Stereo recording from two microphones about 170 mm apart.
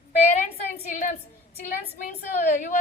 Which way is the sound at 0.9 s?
50° left (ahead or behind).